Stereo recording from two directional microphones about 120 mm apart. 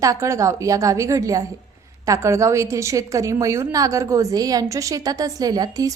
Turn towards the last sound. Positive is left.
turn(degrees=-30)  # may be behind; listen again after turning